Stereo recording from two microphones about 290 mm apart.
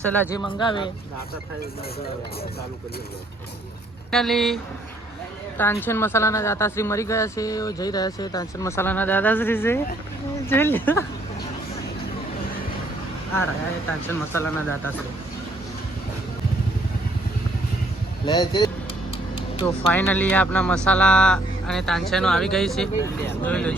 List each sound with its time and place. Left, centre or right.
0.0 s speech: centre
4.1 s speech: centre
14.3 s speech: centre
18.3 s speech: centre
19.9 s speech: centre